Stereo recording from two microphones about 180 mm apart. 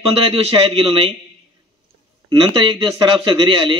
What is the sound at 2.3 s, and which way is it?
A man's voice, 30° right (ahead or behind).